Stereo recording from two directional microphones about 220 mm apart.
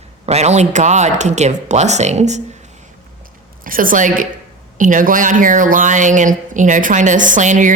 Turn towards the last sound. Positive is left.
turn(degrees=-35)  # may be behind; listen again after turning